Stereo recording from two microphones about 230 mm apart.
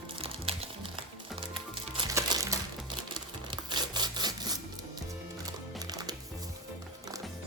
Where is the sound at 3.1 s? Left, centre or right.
Centre.